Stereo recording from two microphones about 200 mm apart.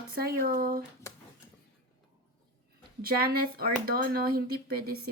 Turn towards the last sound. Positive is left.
turn(degrees=-50)  # may be behind; listen again after turning